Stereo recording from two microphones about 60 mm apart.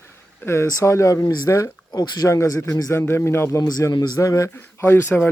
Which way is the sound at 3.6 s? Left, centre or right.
Left.